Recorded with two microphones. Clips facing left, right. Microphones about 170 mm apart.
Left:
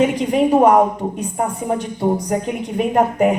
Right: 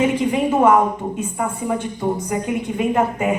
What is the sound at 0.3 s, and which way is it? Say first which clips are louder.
A woman's voice: left 3 dB; 35° left (ahead or behind).